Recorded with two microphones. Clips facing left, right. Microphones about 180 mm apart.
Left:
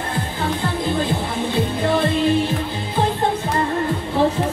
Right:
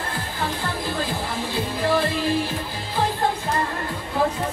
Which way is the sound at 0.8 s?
20° left (ahead or behind).